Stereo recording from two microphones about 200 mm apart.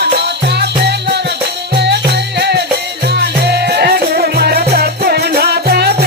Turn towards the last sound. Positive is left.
turn(degrees=-50)  # may be behind; listen again after turning